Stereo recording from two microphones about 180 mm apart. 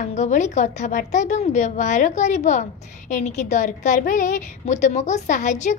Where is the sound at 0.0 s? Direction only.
40° left (ahead or behind).